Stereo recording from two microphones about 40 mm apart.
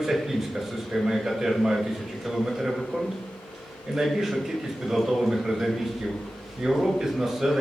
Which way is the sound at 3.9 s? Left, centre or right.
Centre.